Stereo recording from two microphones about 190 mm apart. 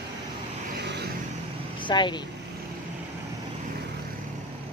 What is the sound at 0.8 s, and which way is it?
Vehicle, 60° right (ahead or behind).